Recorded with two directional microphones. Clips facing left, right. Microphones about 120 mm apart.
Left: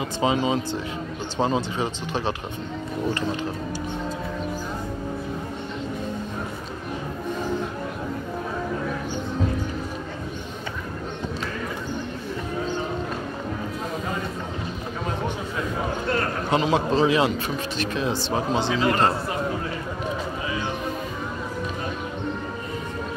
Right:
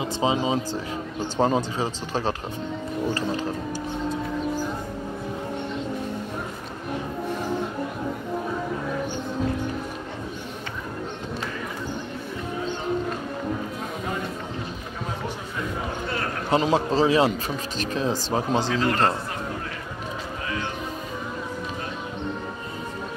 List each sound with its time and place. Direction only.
0.0 s a man's voice: 25° right (ahead or behind)
16.5 s a man's voice: 35° right (ahead or behind)
18.7 s a man's voice: 10° left (ahead or behind)